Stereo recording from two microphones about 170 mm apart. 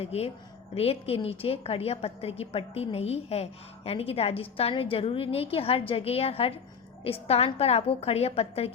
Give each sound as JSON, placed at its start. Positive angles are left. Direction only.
{"t": 0.0, "sound": "a woman's voice", "side_deg": 40}